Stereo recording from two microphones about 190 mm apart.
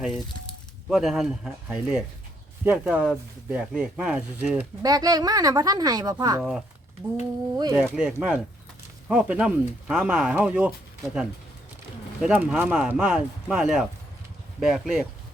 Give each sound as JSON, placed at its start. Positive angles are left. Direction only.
{"t": 0.9, "sound": "speech", "side_deg": 0}
{"t": 4.8, "sound": "a woman's voice", "side_deg": -20}
{"t": 7.5, "sound": "speech", "side_deg": -20}
{"t": 7.9, "sound": "speech", "side_deg": -5}